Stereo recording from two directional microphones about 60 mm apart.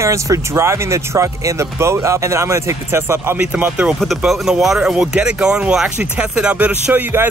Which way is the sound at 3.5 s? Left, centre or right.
Right.